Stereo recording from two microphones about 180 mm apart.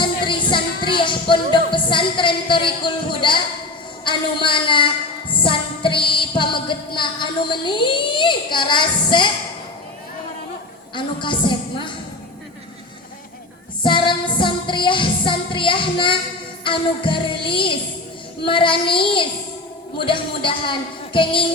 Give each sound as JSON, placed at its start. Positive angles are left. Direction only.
{"t": 0.0, "sound": "music", "side_deg": 25}
{"t": 10.9, "sound": "music", "side_deg": 25}
{"t": 13.8, "sound": "music", "side_deg": 25}